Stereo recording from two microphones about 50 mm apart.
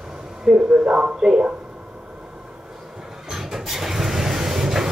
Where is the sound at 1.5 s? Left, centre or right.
Right.